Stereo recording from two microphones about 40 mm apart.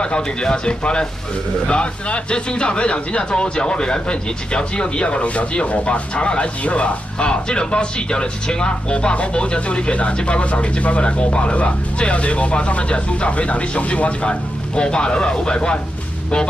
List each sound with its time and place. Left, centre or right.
0.0 s speech: left